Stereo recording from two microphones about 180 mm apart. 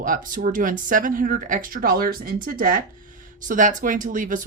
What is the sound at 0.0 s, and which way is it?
Speech, 50° right (ahead or behind).